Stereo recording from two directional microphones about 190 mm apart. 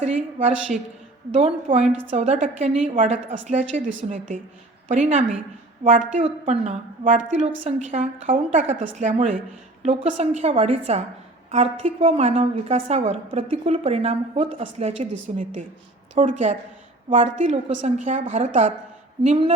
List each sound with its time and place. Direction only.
0.0 s a woman's voice: 35° right (ahead or behind)
1.8 s a woman's voice: centre (ahead or behind)
2.0 s a woman's voice: 35° right (ahead or behind)